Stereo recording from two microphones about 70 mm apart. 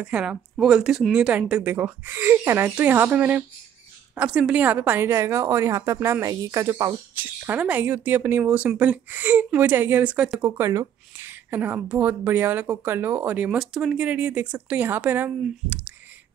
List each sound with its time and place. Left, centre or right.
0.0 s speech: centre
2.0 s a woman's voice: right
4.3 s a woman's voice: centre; by 6.7 s right
7.2 s speech: right
10.6 s speech: right
11.2 s speech: right